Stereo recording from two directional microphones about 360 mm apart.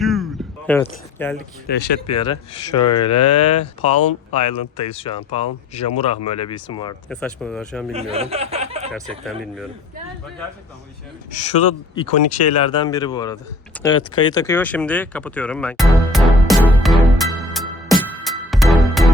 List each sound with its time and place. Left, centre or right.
0.0 s a sound: centre
0.7 s speech: centre
1.6 s speech: left
2.0 s speech: centre
7.9 s snicker: centre
8.9 s speech: centre
11.9 s a sound: centre